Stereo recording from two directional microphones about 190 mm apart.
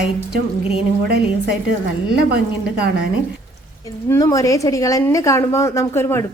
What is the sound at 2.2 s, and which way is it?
Speech, 55° right (ahead or behind).